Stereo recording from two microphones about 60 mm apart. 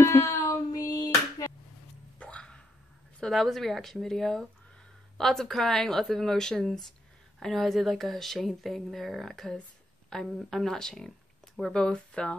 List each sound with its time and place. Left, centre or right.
0.0 s child singing: left
2.1 s hiccup: centre
3.2 s speech: centre